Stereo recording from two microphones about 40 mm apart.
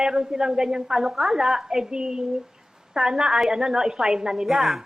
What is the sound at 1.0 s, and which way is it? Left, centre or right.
A woman's voice, centre.